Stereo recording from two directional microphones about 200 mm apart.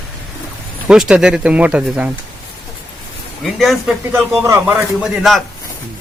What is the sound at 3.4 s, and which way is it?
Speech, centre (ahead or behind).